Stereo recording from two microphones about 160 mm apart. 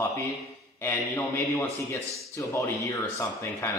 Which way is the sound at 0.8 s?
15° left (ahead or behind).